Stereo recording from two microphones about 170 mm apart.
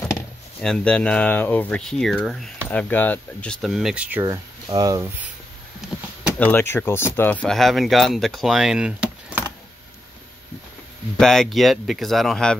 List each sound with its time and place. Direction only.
0.6 s speech: 5° left (ahead or behind)
4.2 s speech: 25° right (ahead or behind)
5.8 s a sound: centre (ahead or behind)
6.3 s speech: 15° left (ahead or behind); by 9.4 s 5° right (ahead or behind)
11.1 s speech: centre (ahead or behind)